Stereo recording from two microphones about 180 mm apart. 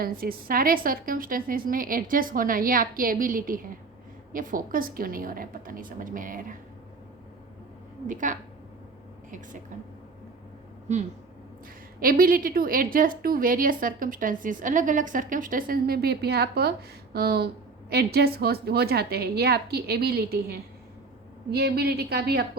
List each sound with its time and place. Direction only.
0.0 s a woman's voice: 55° right (ahead or behind)
8.0 s a woman's voice: 45° right (ahead or behind)
11.9 s a woman's voice: 50° right (ahead or behind)